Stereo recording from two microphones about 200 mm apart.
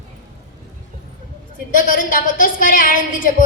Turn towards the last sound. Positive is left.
turn(degrees=40)  # may be behind; listen again after turning